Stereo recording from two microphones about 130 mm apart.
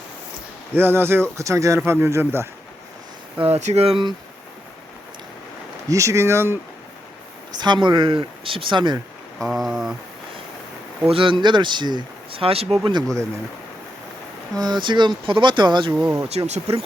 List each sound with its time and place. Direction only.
0.7 s speech: 15° right (ahead or behind)
3.5 s speech: 55° right (ahead or behind)
5.9 s speech: 25° right (ahead or behind)
7.6 s speech: 35° right (ahead or behind)
9.4 s speech: centre (ahead or behind)
11.1 s speech: 40° right (ahead or behind)
12.9 s speech: 30° right (ahead or behind)
14.6 s speech: 35° right (ahead or behind)
15.9 s speech: 15° right (ahead or behind)
16.3 s speech: 50° right (ahead or behind)